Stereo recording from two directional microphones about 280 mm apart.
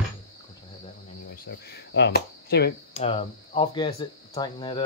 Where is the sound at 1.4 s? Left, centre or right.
Left.